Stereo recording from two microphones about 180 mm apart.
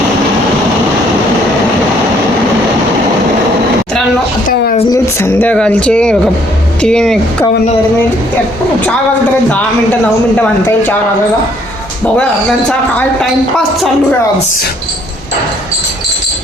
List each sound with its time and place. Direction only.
4.4 s a sound: 50° left (ahead or behind)
4.9 s speech: 10° left (ahead or behind)
10.3 s speech: 10° left (ahead or behind)